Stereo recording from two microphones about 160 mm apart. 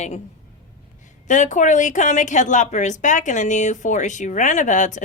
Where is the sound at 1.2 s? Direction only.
50° left (ahead or behind).